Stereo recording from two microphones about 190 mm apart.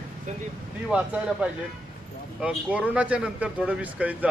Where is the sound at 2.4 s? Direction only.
5° right (ahead or behind).